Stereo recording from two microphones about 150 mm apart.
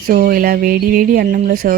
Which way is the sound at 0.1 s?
75° right (ahead or behind).